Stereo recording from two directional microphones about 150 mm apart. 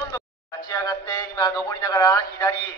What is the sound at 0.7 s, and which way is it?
A man's voice, 25° left (ahead or behind).